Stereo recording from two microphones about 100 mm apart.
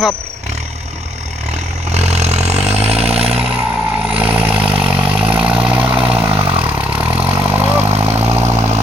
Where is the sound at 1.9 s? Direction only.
90° right.